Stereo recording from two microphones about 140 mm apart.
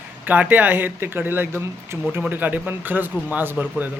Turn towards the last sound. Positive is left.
turn(degrees=-15)  # may be behind; listen again after turning